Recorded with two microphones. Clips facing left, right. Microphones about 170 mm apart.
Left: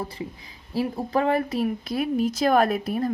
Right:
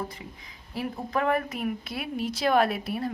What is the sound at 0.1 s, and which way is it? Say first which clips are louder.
Speech: left 8 dB; 30° left (ahead or behind).